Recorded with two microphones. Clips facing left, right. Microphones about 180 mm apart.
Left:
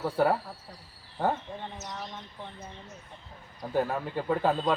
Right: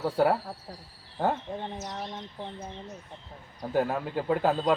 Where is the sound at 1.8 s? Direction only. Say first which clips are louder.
Right 3 dB; 30° right (ahead or behind).